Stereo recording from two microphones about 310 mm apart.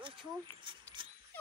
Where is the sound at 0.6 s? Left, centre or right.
Centre.